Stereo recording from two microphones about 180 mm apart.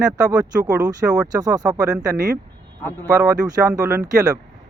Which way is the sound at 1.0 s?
5° right (ahead or behind).